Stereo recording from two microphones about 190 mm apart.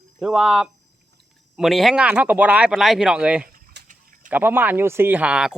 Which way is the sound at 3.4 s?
60° right (ahead or behind).